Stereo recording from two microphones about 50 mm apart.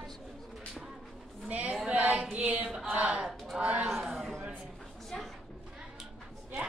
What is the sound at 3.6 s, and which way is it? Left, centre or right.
Speech, right.